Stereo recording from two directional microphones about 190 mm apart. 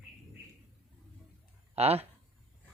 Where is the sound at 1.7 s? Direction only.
35° right (ahead or behind).